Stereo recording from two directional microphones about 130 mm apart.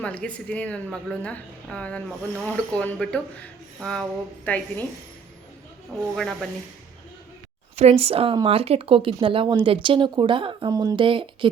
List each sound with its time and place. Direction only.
0.0 s a woman's voice: 10° left (ahead or behind)
6.0 s speech: centre (ahead or behind)
7.8 s speech: 50° right (ahead or behind)
10.7 s speech: 30° right (ahead or behind)